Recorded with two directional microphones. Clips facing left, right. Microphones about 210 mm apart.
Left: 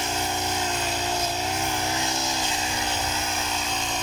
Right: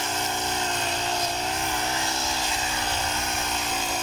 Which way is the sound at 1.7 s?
15° left (ahead or behind).